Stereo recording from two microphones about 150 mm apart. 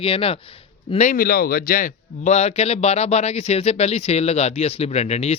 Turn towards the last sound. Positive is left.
turn(degrees=45)  # may be behind; listen again after turning